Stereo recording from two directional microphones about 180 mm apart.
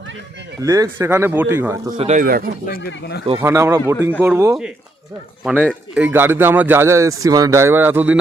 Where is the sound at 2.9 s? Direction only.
70° left (ahead or behind).